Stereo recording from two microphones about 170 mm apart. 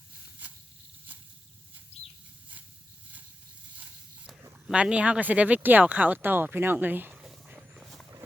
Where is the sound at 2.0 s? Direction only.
40° left (ahead or behind).